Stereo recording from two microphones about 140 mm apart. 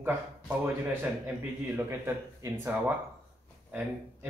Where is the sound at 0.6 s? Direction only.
15° right (ahead or behind).